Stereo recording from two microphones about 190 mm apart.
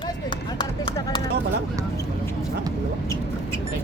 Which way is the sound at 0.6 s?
25° left (ahead or behind).